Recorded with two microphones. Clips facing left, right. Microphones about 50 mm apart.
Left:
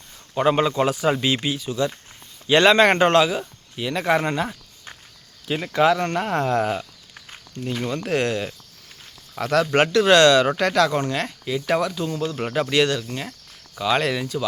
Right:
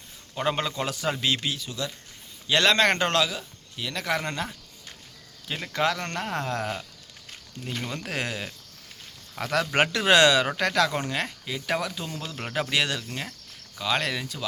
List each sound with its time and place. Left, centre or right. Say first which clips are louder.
0.3 s speech: left 8 dB; centre
5.5 s speech: left 8 dB; centre
6.3 s speech: left 8 dB; left
7.6 s speech: left 7 dB; centre
9.5 s a man's voice: left 5 dB; centre
13.7 s speech: left 6 dB; centre